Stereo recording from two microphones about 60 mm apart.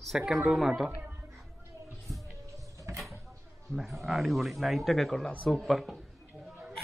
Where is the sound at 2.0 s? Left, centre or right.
Centre.